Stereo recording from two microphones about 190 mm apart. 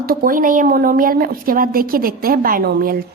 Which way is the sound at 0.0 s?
50° right (ahead or behind).